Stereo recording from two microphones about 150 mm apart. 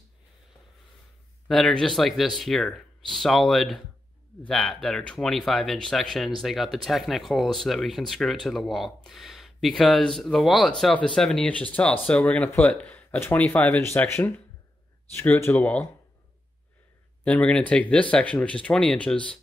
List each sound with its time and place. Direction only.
1.5 s speech: 5° left (ahead or behind)
17.2 s speech: 5° left (ahead or behind)